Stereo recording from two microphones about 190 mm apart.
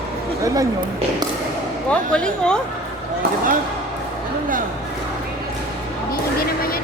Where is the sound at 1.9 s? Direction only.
5° left (ahead or behind).